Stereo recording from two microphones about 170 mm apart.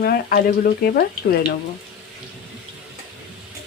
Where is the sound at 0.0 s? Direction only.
65° left (ahead or behind).